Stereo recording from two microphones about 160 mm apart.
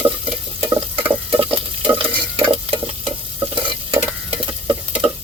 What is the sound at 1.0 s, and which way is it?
Stir, 10° right (ahead or behind).